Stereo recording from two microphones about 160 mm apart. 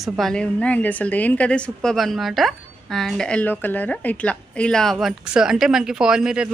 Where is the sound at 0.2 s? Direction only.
5° left (ahead or behind).